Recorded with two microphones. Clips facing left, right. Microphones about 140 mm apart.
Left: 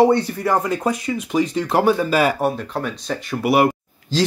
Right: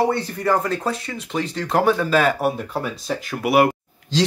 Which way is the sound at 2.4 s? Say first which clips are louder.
Left 1 dB; 5° right (ahead or behind).